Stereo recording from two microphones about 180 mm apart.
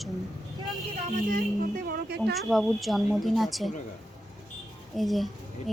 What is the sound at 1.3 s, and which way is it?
Speech, 50° right (ahead or behind).